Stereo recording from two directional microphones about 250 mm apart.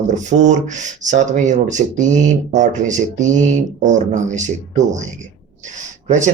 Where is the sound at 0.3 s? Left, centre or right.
Right.